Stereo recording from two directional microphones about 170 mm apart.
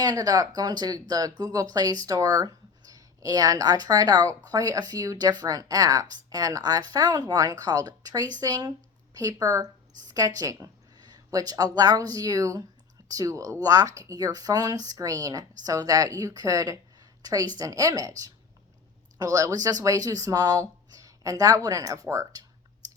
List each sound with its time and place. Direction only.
0.0 s speech: 20° right (ahead or behind)
19.2 s speech: 20° right (ahead or behind)